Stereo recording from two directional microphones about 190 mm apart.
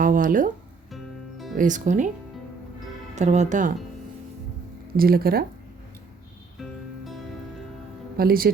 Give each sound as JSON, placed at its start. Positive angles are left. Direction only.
{"t": 0.0, "sound": "speech", "side_deg": -45}
{"t": 0.9, "sound": "music", "side_deg": 0}
{"t": 1.5, "sound": "speech", "side_deg": -40}
{"t": 3.2, "sound": "speech", "side_deg": -40}
{"t": 4.9, "sound": "speech", "side_deg": -50}
{"t": 6.6, "sound": "music", "side_deg": 0}
{"t": 8.2, "sound": "speech", "side_deg": -50}